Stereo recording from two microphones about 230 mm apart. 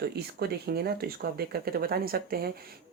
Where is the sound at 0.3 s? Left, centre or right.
Right.